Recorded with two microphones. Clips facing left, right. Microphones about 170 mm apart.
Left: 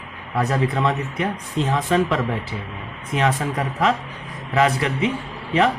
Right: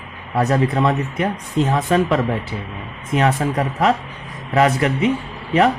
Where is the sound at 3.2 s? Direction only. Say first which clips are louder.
Right 3 dB; 40° right (ahead or behind).